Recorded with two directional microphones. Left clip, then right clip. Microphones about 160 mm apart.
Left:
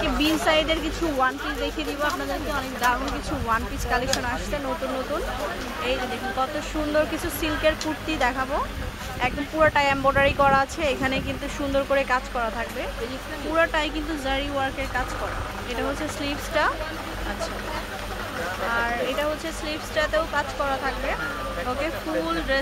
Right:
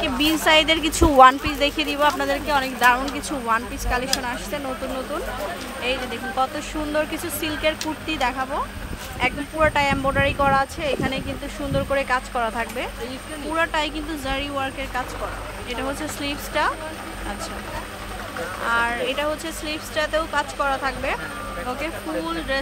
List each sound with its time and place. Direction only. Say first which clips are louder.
0.0 s speech: right 2 dB; 20° right (ahead or behind)
1.2 s speech: right 12 dB; 40° right (ahead or behind)
3.4 s speech: right 2 dB; 15° right (ahead or behind)
6.9 s speech: left 1 dB; 5° right (ahead or behind)
13.6 s speech: even; 10° right (ahead or behind)
16.3 s speech: right 1 dB; 10° right (ahead or behind)
18.7 s speech: right 4 dB; 20° right (ahead or behind)
21.8 s speech: left 1 dB; 5° right (ahead or behind)